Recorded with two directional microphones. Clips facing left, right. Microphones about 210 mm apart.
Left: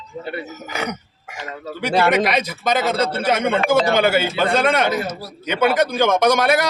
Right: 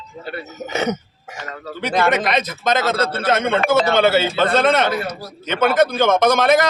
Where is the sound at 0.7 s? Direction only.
25° right (ahead or behind).